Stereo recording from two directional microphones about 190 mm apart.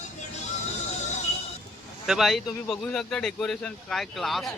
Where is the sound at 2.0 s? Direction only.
Centre (ahead or behind).